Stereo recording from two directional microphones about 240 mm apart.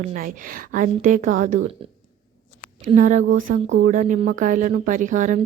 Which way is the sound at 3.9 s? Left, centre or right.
Right.